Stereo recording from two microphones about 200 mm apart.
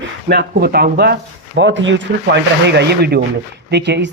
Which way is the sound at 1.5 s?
65° right (ahead or behind).